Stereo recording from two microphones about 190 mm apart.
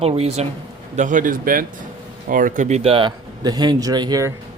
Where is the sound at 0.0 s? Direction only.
35° right (ahead or behind).